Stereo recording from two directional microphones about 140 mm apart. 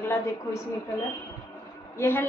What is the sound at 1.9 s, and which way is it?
Speech, 15° left (ahead or behind).